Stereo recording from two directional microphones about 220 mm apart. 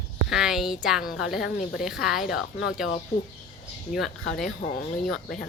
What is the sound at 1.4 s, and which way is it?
Speech, 40° left (ahead or behind).